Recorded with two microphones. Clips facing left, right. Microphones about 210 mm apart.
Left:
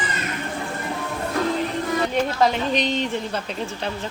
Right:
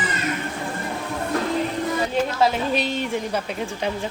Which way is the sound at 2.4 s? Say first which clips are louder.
Left 1 dB; 5° right (ahead or behind).